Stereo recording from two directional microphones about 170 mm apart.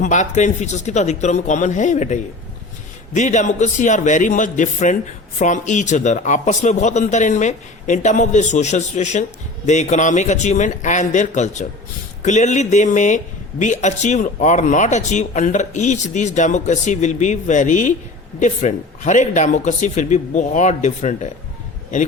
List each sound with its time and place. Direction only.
0.0 s speech: 45° left (ahead or behind)
3.2 s speech: 45° left (ahead or behind)